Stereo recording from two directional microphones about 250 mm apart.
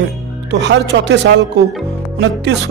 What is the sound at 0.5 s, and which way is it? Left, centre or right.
Speech, right.